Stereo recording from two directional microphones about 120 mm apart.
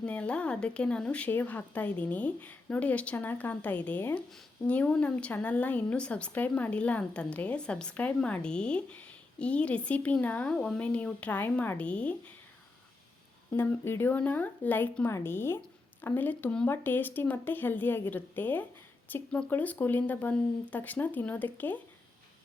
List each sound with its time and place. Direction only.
0.0 s speech: 10° left (ahead or behind)
13.6 s speech: 20° left (ahead or behind)